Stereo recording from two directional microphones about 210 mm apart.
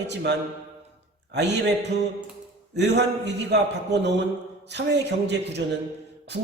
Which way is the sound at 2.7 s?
55° right (ahead or behind).